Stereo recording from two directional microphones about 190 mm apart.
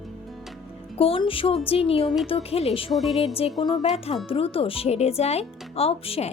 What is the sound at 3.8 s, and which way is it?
Speech, 30° left (ahead or behind).